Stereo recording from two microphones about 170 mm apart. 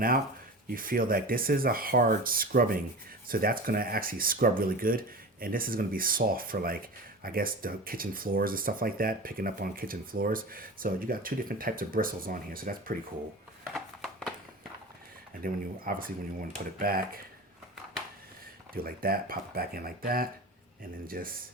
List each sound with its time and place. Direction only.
0.7 s speech: 55° right (ahead or behind)
13.7 s a sound: 5° left (ahead or behind)
15.4 s speech: 55° right (ahead or behind)
18.7 s speech: 60° right (ahead or behind)